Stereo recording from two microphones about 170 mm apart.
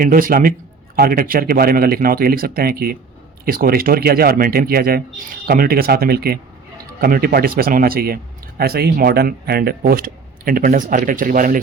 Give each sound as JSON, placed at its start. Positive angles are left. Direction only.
{"t": 0.0, "sound": "speech", "side_deg": -55}